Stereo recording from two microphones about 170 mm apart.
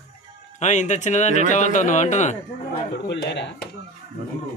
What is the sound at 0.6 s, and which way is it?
Speech, 45° left (ahead or behind).